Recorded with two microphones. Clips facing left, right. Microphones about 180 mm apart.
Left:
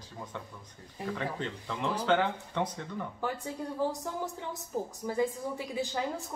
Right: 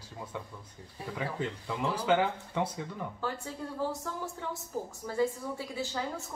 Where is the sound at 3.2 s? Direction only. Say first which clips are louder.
Left 2 dB; 15° left (ahead or behind).